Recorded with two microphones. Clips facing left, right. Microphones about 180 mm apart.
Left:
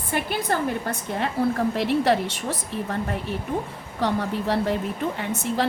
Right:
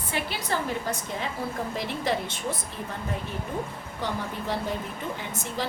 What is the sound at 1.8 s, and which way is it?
A woman's voice, 65° left (ahead or behind).